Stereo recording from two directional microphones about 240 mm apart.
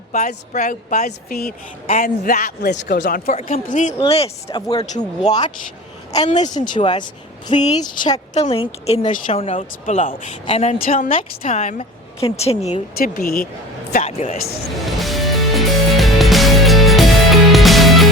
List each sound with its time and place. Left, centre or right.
0.1 s a woman's voice: left
6.5 s a woman's voice: centre
13.0 s speech: left
13.9 s a woman's voice: left
14.8 s music: centre